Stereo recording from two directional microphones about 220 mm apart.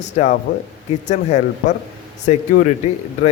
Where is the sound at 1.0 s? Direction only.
35° left (ahead or behind).